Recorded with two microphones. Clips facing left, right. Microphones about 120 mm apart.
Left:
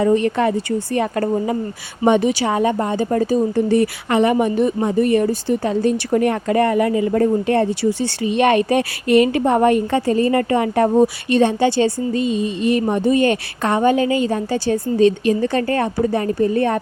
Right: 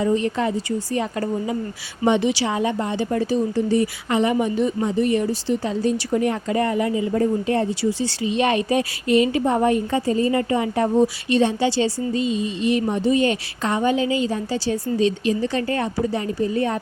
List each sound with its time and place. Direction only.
0.0 s speech: 60° left (ahead or behind)